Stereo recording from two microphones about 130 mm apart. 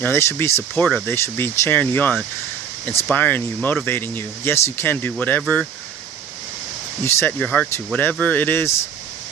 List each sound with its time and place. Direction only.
0.0 s speech: 20° left (ahead or behind)
0.9 s speech: 5° left (ahead or behind)
1.1 s speech: 20° left (ahead or behind)
7.0 s speech: 15° left (ahead or behind)